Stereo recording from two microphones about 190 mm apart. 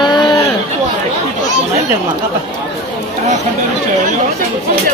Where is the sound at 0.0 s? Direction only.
20° left (ahead or behind).